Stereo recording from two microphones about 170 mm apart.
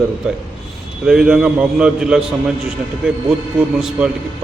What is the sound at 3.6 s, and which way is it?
Speech, 5° right (ahead or behind).